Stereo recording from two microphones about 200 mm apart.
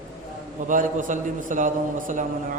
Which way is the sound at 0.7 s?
40° right (ahead or behind).